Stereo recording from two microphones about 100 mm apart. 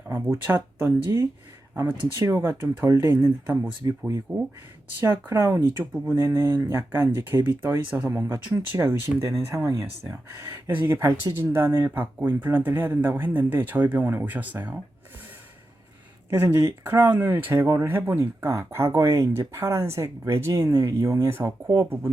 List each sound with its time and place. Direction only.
0.1 s speech: 20° right (ahead or behind)
16.3 s speech: 20° right (ahead or behind)